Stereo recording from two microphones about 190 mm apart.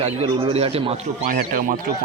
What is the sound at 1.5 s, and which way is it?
Speech, 45° right (ahead or behind).